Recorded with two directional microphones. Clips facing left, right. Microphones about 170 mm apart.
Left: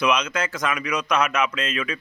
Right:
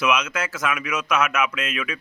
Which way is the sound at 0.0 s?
5° right (ahead or behind).